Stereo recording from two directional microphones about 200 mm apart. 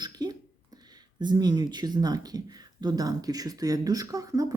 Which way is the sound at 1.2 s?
20° right (ahead or behind).